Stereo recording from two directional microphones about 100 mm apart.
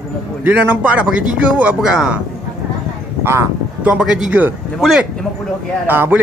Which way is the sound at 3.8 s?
10° right (ahead or behind).